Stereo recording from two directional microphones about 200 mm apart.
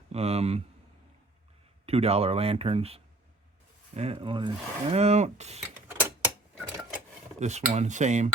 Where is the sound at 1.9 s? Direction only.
30° right (ahead or behind).